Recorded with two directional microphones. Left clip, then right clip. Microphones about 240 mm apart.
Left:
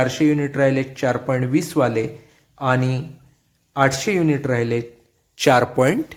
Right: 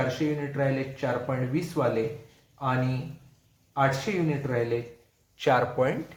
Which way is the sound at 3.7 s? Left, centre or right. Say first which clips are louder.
Left 7 dB; left.